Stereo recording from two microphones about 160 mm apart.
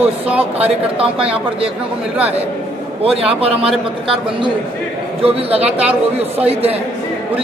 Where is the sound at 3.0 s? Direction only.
35° right (ahead or behind).